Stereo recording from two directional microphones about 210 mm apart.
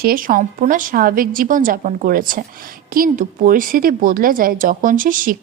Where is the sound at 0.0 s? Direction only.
45° right (ahead or behind).